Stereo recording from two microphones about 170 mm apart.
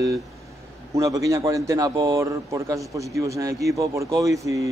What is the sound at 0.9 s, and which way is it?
A man's voice, 20° right (ahead or behind).